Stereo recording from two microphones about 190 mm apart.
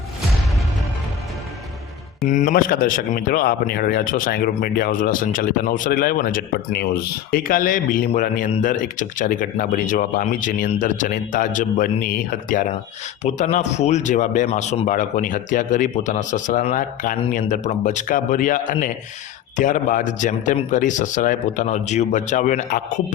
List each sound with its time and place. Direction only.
2.2 s speech: 45° left (ahead or behind)